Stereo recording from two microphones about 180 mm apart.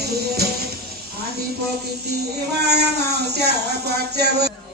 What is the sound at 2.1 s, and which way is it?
Speech, 65° right (ahead or behind).